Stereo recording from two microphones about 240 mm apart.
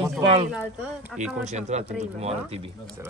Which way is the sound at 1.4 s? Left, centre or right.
Right.